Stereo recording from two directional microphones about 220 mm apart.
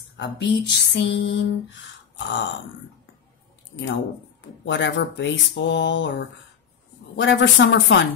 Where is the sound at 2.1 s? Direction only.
55° left (ahead or behind).